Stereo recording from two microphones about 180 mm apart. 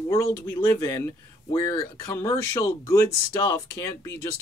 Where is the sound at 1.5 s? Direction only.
20° left (ahead or behind).